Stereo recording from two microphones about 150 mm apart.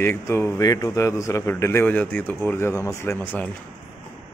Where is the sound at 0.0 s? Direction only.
15° left (ahead or behind).